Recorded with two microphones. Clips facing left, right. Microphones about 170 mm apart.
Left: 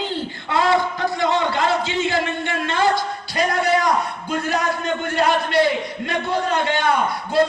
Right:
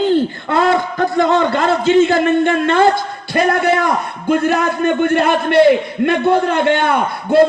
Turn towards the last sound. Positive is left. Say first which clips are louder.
# right 4 dB
turn(degrees=-55)  # may be behind; listen again after turning